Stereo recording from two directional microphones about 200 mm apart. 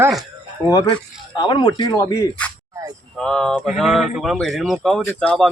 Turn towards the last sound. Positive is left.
turn(degrees=5)  # may be behind; listen again after turning